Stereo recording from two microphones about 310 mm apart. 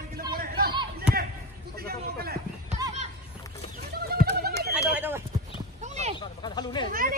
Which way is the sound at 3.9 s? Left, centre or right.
Right.